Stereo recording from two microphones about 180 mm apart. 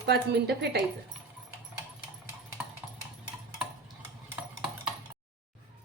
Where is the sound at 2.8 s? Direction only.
5° right (ahead or behind).